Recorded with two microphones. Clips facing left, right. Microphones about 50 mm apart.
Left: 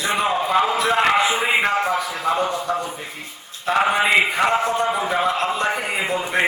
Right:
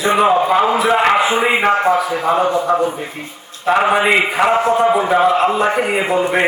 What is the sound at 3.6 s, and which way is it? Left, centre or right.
A man's voice, centre.